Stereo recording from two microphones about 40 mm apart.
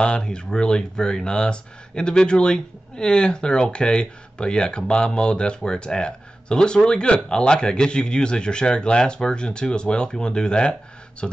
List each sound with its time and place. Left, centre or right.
0.0 s speech: left